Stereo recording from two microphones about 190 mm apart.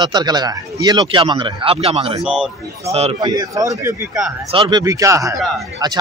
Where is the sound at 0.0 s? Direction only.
20° right (ahead or behind).